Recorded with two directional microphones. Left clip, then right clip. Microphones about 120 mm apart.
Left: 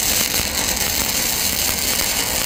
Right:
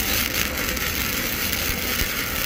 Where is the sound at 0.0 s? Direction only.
45° left (ahead or behind).